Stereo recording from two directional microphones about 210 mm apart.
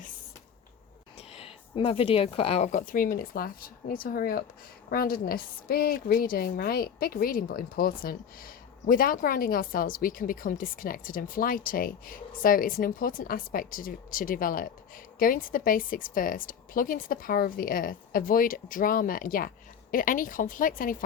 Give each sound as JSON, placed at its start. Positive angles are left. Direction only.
{"t": 1.3, "sound": "a woman's voice", "side_deg": 30}